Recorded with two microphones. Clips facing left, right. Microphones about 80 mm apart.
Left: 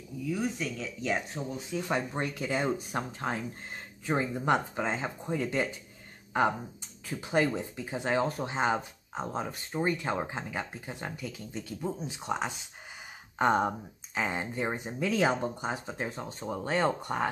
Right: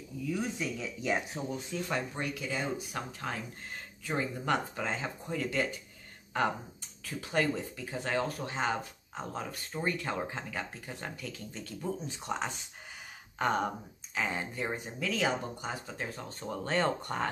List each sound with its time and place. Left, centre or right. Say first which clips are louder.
0.2 s speech: left 2 dB; centre
1.8 s speech: left 4 dB; left
2.1 s speech: left 4 dB; left
7.1 s speech: left 3 dB; centre
13.4 s speech: left 4 dB; left